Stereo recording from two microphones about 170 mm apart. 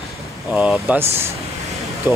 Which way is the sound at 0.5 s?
5° right (ahead or behind).